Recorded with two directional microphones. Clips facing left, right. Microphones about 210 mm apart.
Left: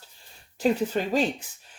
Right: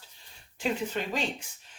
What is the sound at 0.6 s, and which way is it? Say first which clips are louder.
Speech: left 7 dB; 40° left (ahead or behind).